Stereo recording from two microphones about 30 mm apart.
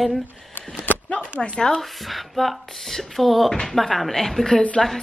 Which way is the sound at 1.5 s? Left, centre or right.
Left.